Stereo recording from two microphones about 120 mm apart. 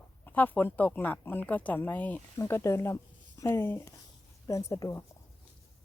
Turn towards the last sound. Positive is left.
turn(degrees=25)  # may be behind; listen again after turning